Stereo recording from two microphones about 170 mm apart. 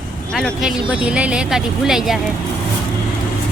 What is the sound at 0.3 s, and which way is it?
Speech, centre (ahead or behind).